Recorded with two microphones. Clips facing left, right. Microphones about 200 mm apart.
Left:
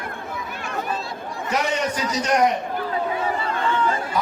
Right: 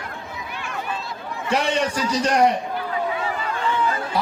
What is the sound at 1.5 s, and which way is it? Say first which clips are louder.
Speech: right 2 dB; 30° right (ahead or behind).